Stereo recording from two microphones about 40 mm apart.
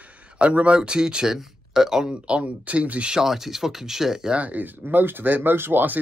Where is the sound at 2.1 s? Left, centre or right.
Right.